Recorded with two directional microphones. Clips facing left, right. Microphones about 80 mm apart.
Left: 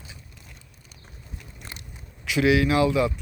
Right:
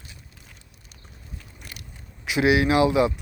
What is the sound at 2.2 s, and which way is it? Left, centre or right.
Speech, right.